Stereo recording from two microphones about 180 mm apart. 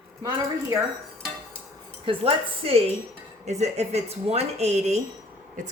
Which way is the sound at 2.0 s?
30° right (ahead or behind).